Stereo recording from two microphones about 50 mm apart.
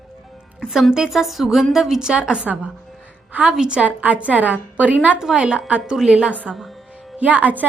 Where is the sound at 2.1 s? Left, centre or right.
Right.